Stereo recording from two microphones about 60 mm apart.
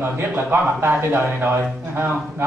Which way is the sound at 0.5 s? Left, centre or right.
Right.